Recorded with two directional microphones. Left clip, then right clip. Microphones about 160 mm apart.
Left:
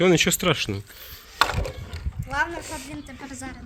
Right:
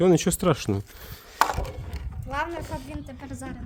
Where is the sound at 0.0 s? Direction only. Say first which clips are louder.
Left 2 dB; 25° right (ahead or behind); by 1.4 s 90° right.